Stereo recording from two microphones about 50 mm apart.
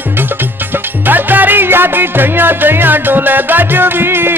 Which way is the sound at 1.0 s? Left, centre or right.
Right.